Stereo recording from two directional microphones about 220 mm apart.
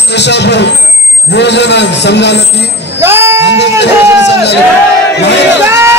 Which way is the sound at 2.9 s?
10° right (ahead or behind).